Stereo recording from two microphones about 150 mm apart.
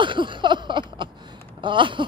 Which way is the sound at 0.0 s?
30° right (ahead or behind).